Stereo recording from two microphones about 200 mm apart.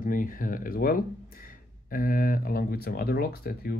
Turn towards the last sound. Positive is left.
turn(degrees=50)  # may be behind; listen again after turning